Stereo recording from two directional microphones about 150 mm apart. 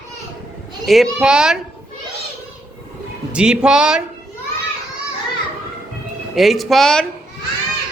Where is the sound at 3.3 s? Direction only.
5° right (ahead or behind).